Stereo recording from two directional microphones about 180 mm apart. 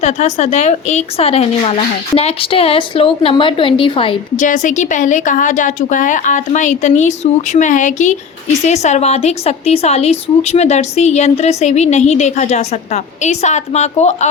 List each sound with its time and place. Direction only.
0.0 s a woman's voice: 40° left (ahead or behind)
4.4 s a woman's voice: 45° left (ahead or behind)